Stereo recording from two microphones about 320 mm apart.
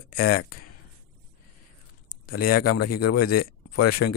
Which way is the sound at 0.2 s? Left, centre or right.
Left.